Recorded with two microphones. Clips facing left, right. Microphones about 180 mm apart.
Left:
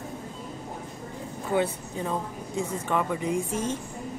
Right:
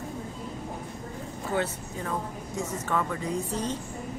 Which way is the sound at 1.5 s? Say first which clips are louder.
Left 4 dB; 15° left (ahead or behind).